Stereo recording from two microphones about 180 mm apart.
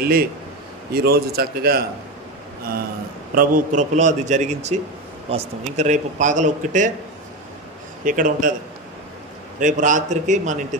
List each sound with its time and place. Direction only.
0.0 s speech: 55° right (ahead or behind)
3.3 s a man's voice: 45° right (ahead or behind)
8.0 s a man's voice: 50° right (ahead or behind)
9.6 s a man's voice: 45° right (ahead or behind)